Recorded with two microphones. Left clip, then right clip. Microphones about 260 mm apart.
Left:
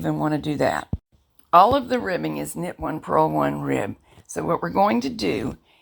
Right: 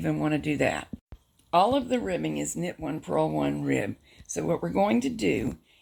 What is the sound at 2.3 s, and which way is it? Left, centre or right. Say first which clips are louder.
Speech: left 3 dB; centre.